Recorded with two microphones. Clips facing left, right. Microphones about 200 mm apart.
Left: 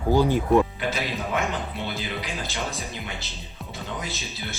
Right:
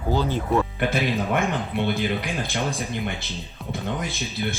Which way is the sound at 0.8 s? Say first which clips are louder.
Right 5 dB; 55° right (ahead or behind).